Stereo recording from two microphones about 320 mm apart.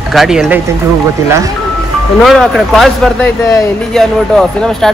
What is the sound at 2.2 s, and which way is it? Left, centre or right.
Speech, centre.